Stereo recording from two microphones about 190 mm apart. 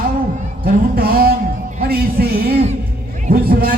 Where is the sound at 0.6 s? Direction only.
50° right (ahead or behind).